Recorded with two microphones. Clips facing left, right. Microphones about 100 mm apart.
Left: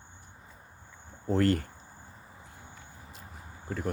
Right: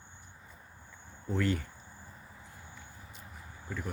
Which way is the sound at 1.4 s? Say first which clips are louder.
Left 5 dB; 60° left (ahead or behind).